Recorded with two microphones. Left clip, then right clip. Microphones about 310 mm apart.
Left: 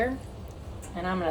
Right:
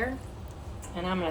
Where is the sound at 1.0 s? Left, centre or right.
Right.